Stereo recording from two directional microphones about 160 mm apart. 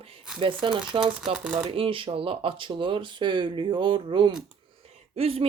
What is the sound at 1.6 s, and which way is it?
Speech, 35° right (ahead or behind).